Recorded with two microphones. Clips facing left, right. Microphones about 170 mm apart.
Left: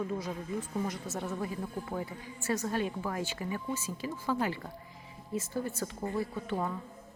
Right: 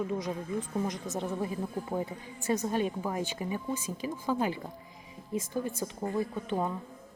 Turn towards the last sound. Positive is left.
turn(degrees=-15)  # may be behind; listen again after turning